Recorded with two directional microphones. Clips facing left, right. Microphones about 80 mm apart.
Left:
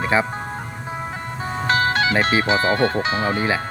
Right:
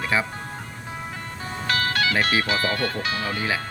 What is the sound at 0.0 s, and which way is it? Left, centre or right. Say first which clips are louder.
Speech: left 5 dB; left.